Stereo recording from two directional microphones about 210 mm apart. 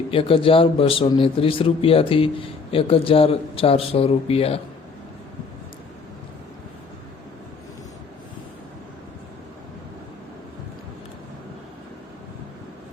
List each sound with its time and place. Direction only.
0.1 s speech: 25° left (ahead or behind)